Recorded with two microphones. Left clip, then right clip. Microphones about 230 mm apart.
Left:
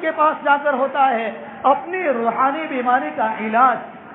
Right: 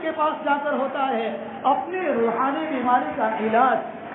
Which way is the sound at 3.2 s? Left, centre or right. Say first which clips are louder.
Left 6 dB; left.